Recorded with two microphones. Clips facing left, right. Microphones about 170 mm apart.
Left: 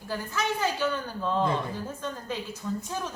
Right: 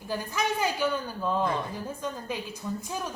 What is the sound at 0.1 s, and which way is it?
Speech, 15° right (ahead or behind).